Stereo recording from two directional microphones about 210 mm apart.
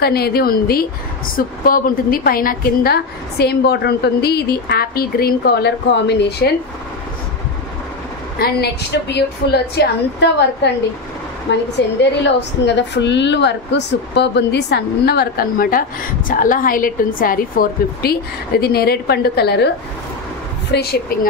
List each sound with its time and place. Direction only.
0.0 s a woman's voice: 50° left (ahead or behind)
8.4 s a woman's voice: 50° left (ahead or behind)
20.7 s a woman's voice: 50° left (ahead or behind)